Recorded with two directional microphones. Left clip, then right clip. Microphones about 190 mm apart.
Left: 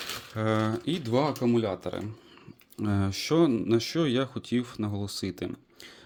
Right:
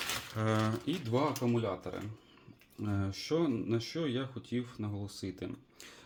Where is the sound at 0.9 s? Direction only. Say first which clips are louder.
Left 6 dB; 45° left (ahead or behind).